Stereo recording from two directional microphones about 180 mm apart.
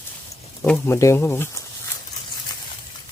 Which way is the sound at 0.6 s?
5° left (ahead or behind).